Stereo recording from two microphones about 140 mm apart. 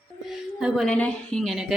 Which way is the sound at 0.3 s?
Centre (ahead or behind).